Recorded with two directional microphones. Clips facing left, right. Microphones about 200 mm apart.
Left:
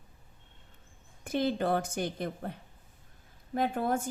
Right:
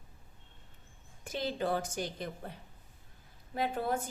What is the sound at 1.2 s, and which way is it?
A woman's voice, 55° left (ahead or behind).